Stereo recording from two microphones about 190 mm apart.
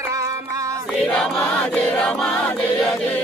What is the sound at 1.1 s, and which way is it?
Choir, 5° left (ahead or behind).